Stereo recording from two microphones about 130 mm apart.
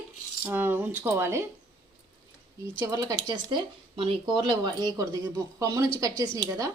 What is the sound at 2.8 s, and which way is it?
Speech, 25° right (ahead or behind).